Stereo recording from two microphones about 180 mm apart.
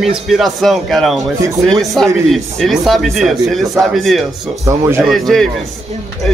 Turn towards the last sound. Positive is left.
turn(degrees=0)  # may be behind; listen again after turning